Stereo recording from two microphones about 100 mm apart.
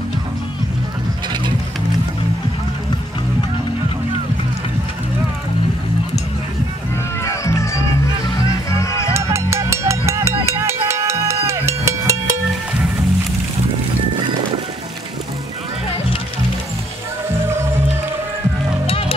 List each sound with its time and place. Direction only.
7.2 s music: 30° left (ahead or behind)
9.1 s music: 25° right (ahead or behind)
18.9 s music: 70° left (ahead or behind)